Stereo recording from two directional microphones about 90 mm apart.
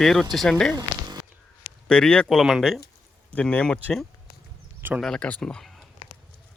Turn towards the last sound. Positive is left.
turn(degrees=5)  # may be behind; listen again after turning